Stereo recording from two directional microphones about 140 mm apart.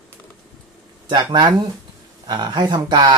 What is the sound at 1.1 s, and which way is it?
Speech, 30° right (ahead or behind).